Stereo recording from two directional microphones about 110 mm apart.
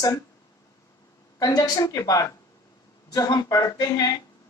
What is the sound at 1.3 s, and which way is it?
Speech, 35° left (ahead or behind).